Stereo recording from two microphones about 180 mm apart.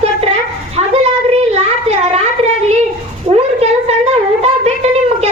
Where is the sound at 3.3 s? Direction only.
35° right (ahead or behind).